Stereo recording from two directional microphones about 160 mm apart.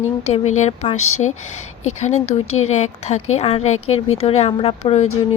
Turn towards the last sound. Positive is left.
turn(degrees=40)  # may be behind; listen again after turning